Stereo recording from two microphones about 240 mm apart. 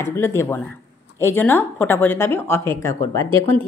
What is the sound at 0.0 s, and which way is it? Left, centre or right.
Speech, centre.